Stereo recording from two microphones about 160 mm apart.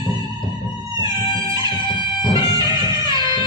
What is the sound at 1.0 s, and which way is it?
Music, 30° left (ahead or behind).